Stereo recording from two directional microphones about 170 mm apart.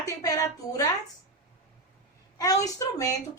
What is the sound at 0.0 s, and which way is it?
Speech, 20° left (ahead or behind).